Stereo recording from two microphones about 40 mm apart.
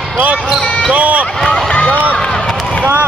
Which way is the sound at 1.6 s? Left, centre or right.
Left.